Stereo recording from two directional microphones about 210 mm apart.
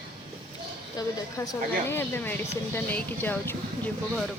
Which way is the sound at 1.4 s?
10° left (ahead or behind).